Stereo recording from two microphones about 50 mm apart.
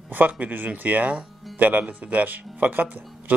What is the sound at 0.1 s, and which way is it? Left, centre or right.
Speech, right.